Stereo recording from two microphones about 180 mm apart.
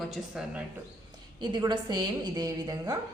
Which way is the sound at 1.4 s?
25° right (ahead or behind).